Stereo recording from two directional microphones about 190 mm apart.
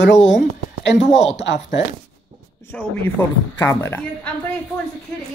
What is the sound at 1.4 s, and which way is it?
Speech, 65° left (ahead or behind).